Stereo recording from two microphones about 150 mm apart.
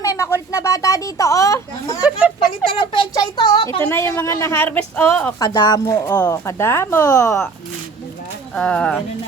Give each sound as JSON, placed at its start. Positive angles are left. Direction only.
{"t": 0.0, "sound": "a sound", "side_deg": 20}
{"t": 0.5, "sound": "speech", "side_deg": 20}
{"t": 2.0, "sound": "speech", "side_deg": -5}
{"t": 2.7, "sound": "speech", "side_deg": 35}
{"t": 3.8, "sound": "speech", "side_deg": 15}
{"t": 5.4, "sound": "speech", "side_deg": 25}
{"t": 8.5, "sound": "speech", "side_deg": 5}